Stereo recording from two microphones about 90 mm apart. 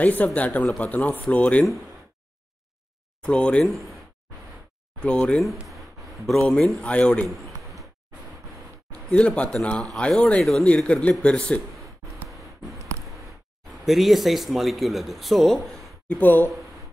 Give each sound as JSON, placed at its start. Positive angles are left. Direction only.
{"t": 0.0, "sound": "speech", "side_deg": 15}
{"t": 3.2, "sound": "speech", "side_deg": 10}
{"t": 3.6, "sound": "speech", "side_deg": 0}
{"t": 5.0, "sound": "speech", "side_deg": 10}
{"t": 5.7, "sound": "a sound", "side_deg": 0}
{"t": 6.4, "sound": "speech", "side_deg": 10}
{"t": 7.2, "sound": "a sound", "side_deg": 0}
{"t": 8.9, "sound": "a man's voice", "side_deg": 10}
{"t": 13.8, "sound": "a man's voice", "side_deg": 0}
{"t": 16.1, "sound": "speech", "side_deg": 20}